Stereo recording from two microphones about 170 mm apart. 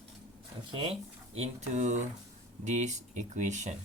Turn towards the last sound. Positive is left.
turn(degrees=-45)  # may be behind; listen again after turning